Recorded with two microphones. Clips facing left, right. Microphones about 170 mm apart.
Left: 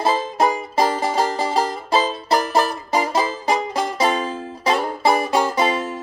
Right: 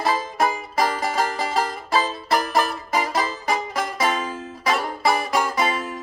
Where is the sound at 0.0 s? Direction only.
25° left (ahead or behind).